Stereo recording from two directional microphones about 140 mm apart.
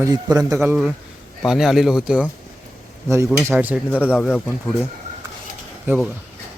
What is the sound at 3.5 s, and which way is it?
Speech, 10° right (ahead or behind).